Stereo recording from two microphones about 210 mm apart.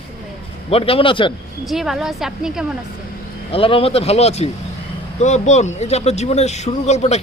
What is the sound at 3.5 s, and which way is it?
Speech, 25° left (ahead or behind).